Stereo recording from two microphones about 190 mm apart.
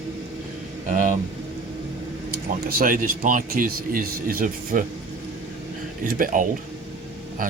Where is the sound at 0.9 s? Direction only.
40° right (ahead or behind).